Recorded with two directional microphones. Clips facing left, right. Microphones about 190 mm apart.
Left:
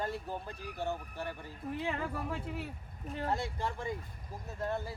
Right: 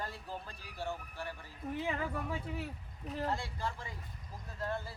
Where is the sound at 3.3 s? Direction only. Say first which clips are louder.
Left 3 dB; 20° left (ahead or behind).